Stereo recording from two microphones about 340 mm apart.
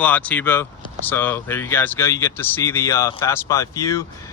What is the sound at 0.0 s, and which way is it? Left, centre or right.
Speech, centre.